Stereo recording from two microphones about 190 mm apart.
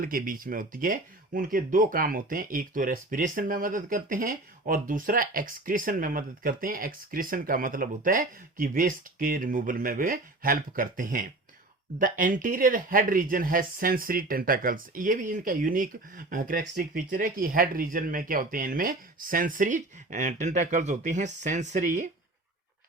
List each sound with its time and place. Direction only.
0.0 s speech: 50° right (ahead or behind)